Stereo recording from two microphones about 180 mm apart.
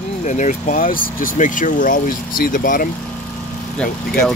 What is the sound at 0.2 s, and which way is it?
Speech, 45° left (ahead or behind).